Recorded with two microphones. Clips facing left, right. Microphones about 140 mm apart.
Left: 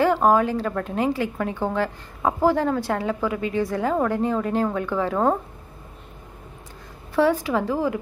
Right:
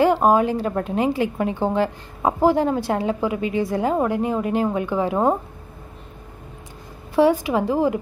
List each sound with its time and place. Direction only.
0.0 s a woman's voice: 20° right (ahead or behind)
7.2 s a woman's voice: 15° right (ahead or behind)